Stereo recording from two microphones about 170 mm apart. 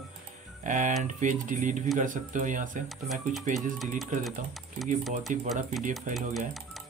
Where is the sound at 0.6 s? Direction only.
45° right (ahead or behind).